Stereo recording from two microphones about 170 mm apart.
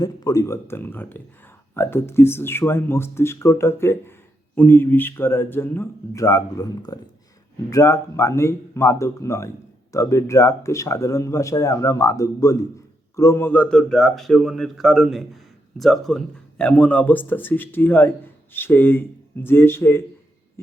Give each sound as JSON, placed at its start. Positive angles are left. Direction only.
{"t": 0.0, "sound": "a man's voice", "side_deg": 20}